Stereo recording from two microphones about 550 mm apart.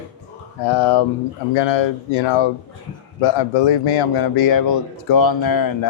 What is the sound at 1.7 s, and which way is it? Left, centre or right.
Speech, left.